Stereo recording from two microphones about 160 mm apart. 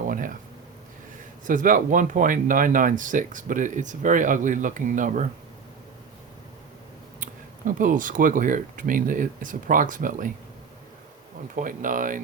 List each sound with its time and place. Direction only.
0.1 s a sound: 60° right (ahead or behind)
1.5 s speech: 55° right (ahead or behind)
7.7 s speech: 55° right (ahead or behind)
11.5 s speech: 55° right (ahead or behind)